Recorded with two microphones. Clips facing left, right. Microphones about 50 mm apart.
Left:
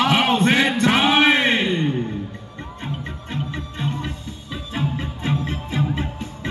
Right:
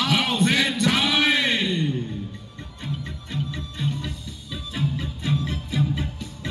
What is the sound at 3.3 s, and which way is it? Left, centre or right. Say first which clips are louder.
Music: left 2 dB; left.